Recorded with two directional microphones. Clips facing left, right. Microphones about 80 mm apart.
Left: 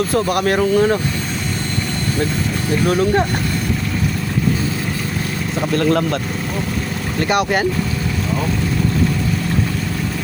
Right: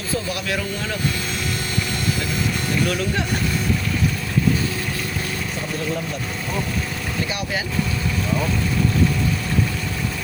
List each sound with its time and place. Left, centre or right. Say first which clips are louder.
0.1 s speech: left 8 dB; left
2.8 s speech: left 10 dB; left
5.7 s speech: left 11 dB; left
7.2 s speech: left 11 dB; left